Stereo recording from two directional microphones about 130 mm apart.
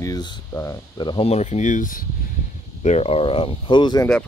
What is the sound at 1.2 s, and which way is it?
Speech, 60° left (ahead or behind).